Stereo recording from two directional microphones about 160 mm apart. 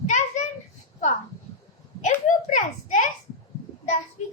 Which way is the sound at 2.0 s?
50° left (ahead or behind).